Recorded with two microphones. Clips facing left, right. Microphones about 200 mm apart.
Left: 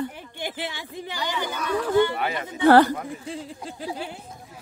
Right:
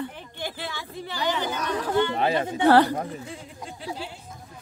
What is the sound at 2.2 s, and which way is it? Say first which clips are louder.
Speech: right 5 dB; 30° right (ahead or behind).